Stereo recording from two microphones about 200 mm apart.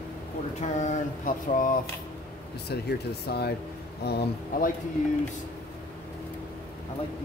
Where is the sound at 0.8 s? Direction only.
40° left (ahead or behind).